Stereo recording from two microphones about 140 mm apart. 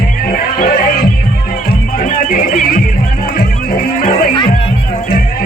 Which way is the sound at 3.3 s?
90° left.